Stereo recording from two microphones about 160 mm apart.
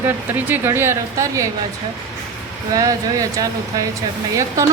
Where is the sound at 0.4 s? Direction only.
15° right (ahead or behind).